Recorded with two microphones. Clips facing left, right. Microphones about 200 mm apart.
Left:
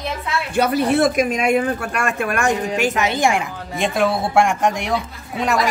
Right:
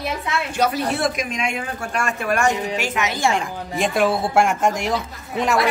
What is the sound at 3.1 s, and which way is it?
Speech, 15° left (ahead or behind).